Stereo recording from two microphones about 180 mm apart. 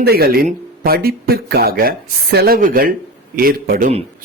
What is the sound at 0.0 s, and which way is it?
A woman's voice, 60° right (ahead or behind).